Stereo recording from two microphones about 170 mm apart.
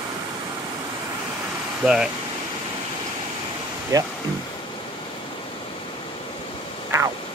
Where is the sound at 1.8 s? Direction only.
5° right (ahead or behind).